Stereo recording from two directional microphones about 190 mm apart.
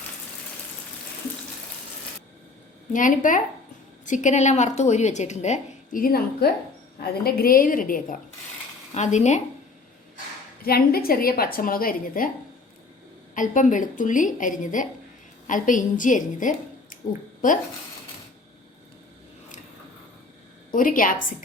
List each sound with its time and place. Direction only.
2.9 s a woman's voice: 45° left (ahead or behind)
10.6 s a woman's voice: 50° left (ahead or behind)
13.3 s a woman's voice: 45° left (ahead or behind)
20.7 s a woman's voice: 45° left (ahead or behind)